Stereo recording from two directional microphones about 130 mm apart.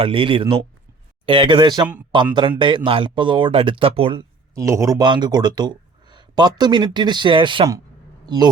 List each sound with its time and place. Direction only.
0.0 s speech: 40° right (ahead or behind)
4.2 s speech: 25° right (ahead or behind)